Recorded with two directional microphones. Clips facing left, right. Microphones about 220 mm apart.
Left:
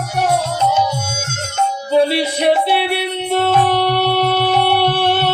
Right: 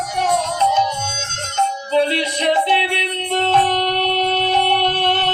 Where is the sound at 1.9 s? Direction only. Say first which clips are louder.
Left 4 dB; 10° left (ahead or behind).